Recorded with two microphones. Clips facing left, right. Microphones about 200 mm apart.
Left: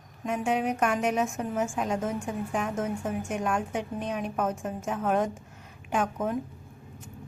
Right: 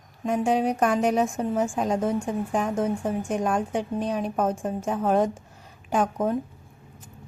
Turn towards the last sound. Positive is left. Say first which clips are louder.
# right 4 dB
turn(degrees=-35)  # may be behind; listen again after turning